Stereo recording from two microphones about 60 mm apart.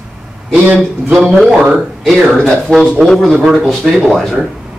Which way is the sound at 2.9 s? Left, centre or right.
Centre.